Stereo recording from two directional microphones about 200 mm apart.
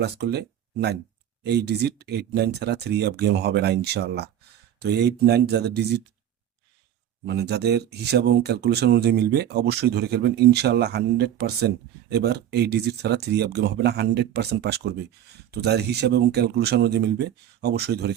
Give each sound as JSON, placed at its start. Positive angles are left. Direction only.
{"t": 0.0, "sound": "speech", "side_deg": -55}
{"t": 7.3, "sound": "speech", "side_deg": -55}